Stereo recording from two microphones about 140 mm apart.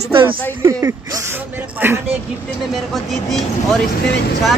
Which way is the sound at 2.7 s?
Centre (ahead or behind).